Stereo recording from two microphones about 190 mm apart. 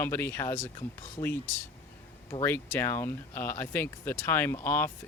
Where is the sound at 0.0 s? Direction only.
10° left (ahead or behind).